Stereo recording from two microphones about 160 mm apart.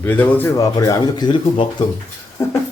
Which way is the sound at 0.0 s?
10° left (ahead or behind).